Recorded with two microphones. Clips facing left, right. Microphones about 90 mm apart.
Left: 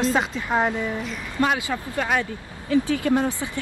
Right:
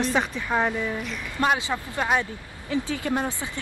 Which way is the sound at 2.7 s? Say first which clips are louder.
Left 6 dB; 25° right (ahead or behind).